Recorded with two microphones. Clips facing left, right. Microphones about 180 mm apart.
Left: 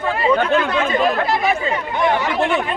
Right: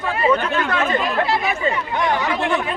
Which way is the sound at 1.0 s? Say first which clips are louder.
Left 3 dB; 40° left (ahead or behind).